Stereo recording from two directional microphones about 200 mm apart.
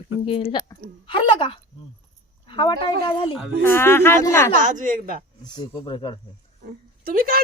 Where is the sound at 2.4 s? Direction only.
20° left (ahead or behind).